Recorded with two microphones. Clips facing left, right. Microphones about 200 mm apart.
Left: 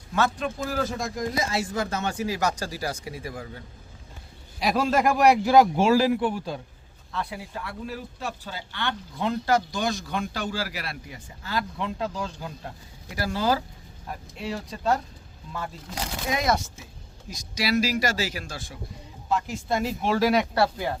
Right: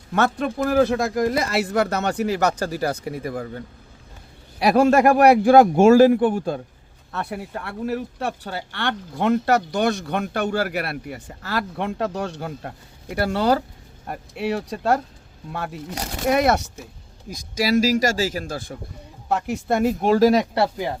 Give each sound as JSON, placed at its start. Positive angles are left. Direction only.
{"t": 0.1, "sound": "a man's voice", "side_deg": -55}
{"t": 4.6, "sound": "a man's voice", "side_deg": -65}
{"t": 7.1, "sound": "a man's voice", "side_deg": -60}
{"t": 17.2, "sound": "a man's voice", "side_deg": -45}
{"t": 19.3, "sound": "a man's voice", "side_deg": -65}
{"t": 20.6, "sound": "speech", "side_deg": -15}